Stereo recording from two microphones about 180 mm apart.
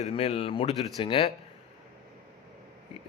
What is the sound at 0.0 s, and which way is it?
A man's voice, 35° left (ahead or behind).